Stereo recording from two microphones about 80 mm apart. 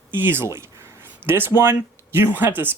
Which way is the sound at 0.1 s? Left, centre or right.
Right.